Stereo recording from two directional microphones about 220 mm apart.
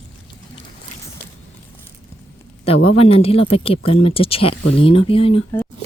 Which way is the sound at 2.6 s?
25° left (ahead or behind).